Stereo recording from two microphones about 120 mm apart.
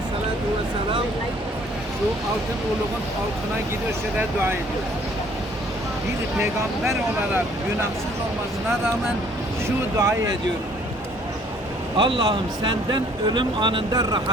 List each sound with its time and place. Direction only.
9.6 s speech: 25° right (ahead or behind)
11.9 s a man's voice: 45° right (ahead or behind)